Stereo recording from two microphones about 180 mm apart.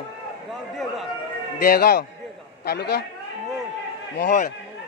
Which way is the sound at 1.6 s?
55° left (ahead or behind).